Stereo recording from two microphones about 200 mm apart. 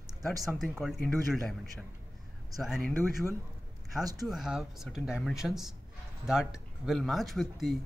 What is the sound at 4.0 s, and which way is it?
Speech, 20° right (ahead or behind).